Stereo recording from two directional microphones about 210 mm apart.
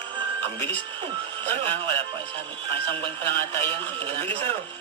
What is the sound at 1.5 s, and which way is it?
Speech, 25° right (ahead or behind).